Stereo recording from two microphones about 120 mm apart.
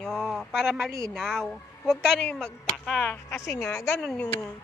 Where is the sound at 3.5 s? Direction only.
25° left (ahead or behind).